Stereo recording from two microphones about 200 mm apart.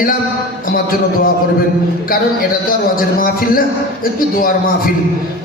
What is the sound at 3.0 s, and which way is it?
Speech, 45° left (ahead or behind).